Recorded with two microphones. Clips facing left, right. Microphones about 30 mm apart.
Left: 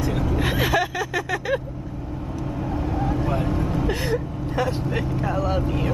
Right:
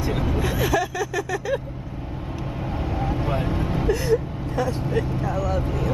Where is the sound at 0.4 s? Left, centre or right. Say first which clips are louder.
Left 1 dB; left.